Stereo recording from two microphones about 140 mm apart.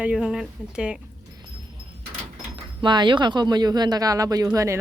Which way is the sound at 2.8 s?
35° right (ahead or behind).